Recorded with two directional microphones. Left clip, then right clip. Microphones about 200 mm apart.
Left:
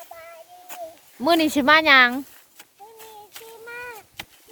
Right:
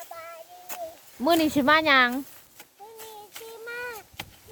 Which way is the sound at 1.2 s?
10° left (ahead or behind).